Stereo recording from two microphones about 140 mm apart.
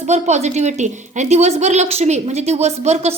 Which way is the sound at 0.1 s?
55° right (ahead or behind).